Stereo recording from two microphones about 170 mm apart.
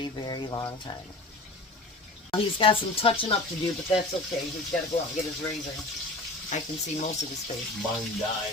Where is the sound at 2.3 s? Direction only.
30° left (ahead or behind).